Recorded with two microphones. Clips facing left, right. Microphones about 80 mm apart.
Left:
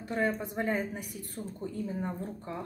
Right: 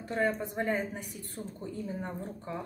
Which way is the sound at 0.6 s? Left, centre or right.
Centre.